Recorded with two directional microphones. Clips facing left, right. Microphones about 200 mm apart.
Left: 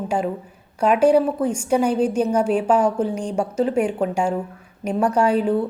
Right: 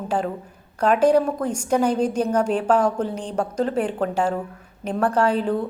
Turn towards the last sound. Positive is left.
turn(degrees=10)  # may be behind; listen again after turning